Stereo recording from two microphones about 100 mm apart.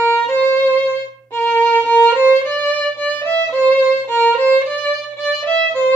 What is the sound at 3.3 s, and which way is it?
Music, 15° left (ahead or behind).